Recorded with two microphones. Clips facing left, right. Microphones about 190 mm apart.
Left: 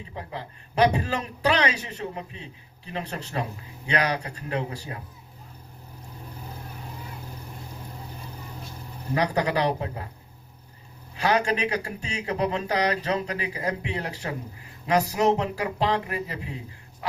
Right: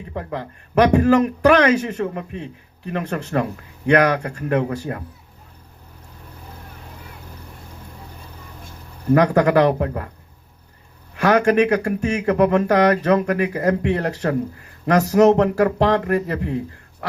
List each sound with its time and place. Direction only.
0.2 s speech: 50° right (ahead or behind)
9.1 s speech: 50° right (ahead or behind)
11.1 s speech: 55° right (ahead or behind)
13.8 s speech: 70° right (ahead or behind)
15.2 s speech: 80° right
15.5 s speech: 50° right (ahead or behind)
15.9 s speech: 70° right (ahead or behind)